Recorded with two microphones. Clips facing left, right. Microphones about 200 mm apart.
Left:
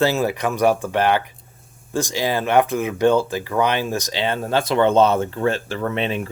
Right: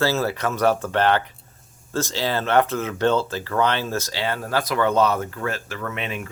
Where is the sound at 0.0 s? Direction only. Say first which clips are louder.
Left 3 dB; 15° left (ahead or behind).